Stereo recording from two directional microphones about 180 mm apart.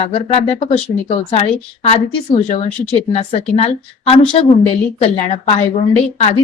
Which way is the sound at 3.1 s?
35° left (ahead or behind).